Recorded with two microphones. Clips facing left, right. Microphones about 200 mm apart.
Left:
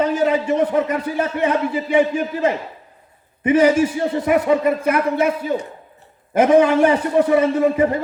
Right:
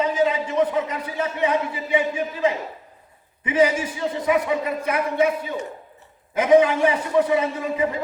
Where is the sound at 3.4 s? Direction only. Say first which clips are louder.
Left 4 dB; 70° left (ahead or behind).